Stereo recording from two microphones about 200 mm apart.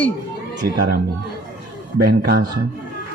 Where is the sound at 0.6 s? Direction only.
50° right (ahead or behind).